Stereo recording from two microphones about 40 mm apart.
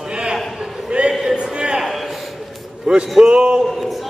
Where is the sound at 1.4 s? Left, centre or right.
Centre.